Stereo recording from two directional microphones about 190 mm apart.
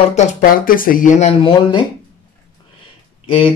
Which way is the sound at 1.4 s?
25° left (ahead or behind).